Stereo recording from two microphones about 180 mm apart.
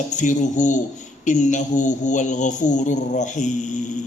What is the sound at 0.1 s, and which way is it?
Speech, 40° left (ahead or behind).